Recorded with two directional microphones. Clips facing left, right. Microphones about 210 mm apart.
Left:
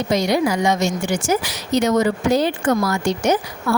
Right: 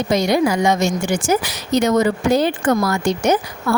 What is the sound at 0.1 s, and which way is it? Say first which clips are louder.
A woman's voice: right 2 dB; 50° right (ahead or behind).